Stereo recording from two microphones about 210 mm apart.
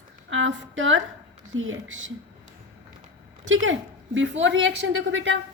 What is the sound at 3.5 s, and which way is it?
A woman's voice, 65° right (ahead or behind).